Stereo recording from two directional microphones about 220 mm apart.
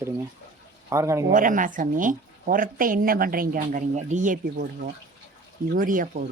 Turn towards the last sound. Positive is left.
turn(degrees=-40)  # may be behind; listen again after turning